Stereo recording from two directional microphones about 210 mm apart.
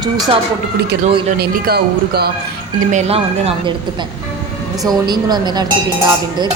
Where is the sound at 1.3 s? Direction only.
45° right (ahead or behind).